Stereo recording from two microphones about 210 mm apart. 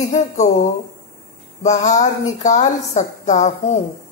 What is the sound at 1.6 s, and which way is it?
A woman's voice, 35° left (ahead or behind).